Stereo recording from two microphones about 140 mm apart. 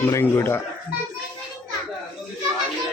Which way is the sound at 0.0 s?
20° left (ahead or behind).